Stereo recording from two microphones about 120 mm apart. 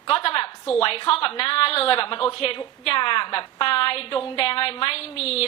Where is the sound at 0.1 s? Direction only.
50° left (ahead or behind).